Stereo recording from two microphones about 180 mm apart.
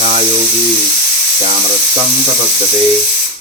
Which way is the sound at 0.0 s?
35° right (ahead or behind).